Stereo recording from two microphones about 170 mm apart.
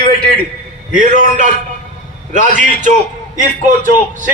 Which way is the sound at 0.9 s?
50° right (ahead or behind).